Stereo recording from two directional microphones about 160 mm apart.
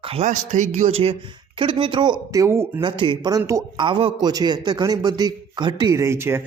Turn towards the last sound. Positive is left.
turn(degrees=-15)  # may be behind; listen again after turning